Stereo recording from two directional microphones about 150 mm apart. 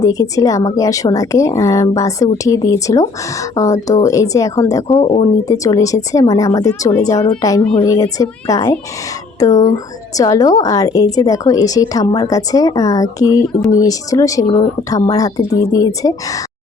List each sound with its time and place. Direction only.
0.0 s a woman's voice: 25° left (ahead or behind)
4.9 s speech: 40° left (ahead or behind)
5.5 s a woman's voice: 20° left (ahead or behind)
7.6 s a woman's voice: 10° left (ahead or behind)
7.9 s a woman's voice: 25° left (ahead or behind)